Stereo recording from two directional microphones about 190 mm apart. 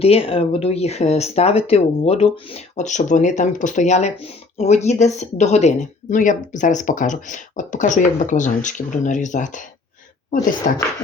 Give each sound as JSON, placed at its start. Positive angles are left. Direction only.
{"t": 0.0, "sound": "speech", "side_deg": 30}
{"t": 10.6, "sound": "speech", "side_deg": 45}